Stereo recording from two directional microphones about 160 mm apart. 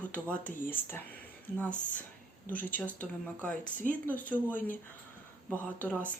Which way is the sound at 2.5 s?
10° left (ahead or behind).